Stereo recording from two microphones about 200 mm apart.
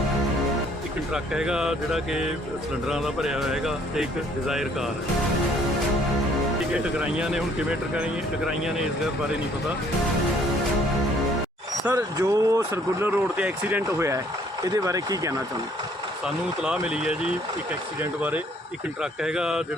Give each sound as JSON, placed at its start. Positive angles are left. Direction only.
{"t": 1.1, "sound": "speech", "side_deg": -5}
{"t": 6.7, "sound": "speech", "side_deg": -5}
{"t": 11.9, "sound": "speech", "side_deg": -15}
{"t": 16.2, "sound": "speech", "side_deg": -5}
{"t": 18.2, "sound": "speech", "side_deg": -5}